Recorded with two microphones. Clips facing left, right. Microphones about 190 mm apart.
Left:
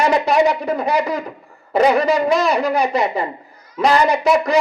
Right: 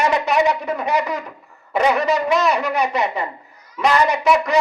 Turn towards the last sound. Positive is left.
turn(degrees=30)  # may be behind; listen again after turning